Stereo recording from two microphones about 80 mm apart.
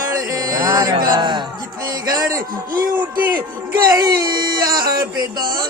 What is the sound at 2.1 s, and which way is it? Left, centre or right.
Music, right.